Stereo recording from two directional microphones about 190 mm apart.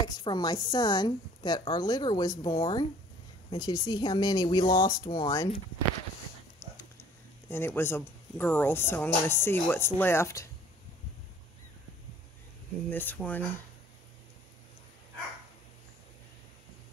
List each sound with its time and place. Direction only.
0.0 s speech: 20° left (ahead or behind)
7.4 s speech: 10° left (ahead or behind)
12.9 s speech: 10° left (ahead or behind)